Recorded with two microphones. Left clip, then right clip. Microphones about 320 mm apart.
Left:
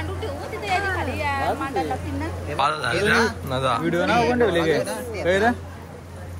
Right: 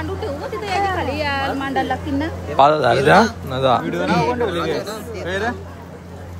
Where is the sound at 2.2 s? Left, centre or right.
Centre.